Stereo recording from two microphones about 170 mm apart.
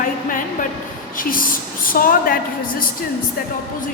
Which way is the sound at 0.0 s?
55° left (ahead or behind).